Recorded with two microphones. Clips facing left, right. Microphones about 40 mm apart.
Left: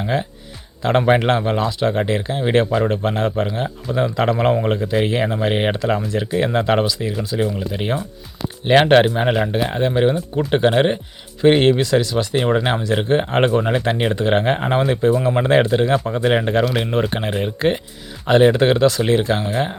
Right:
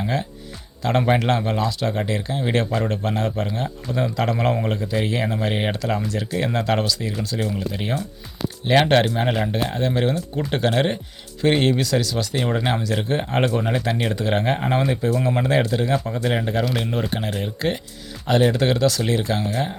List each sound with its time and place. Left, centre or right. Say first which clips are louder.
0.0 s speech: left 3 dB; left